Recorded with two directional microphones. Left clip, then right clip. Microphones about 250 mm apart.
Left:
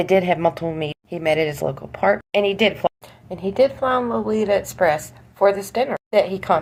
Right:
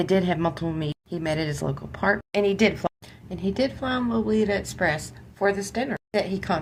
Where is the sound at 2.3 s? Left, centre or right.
Centre.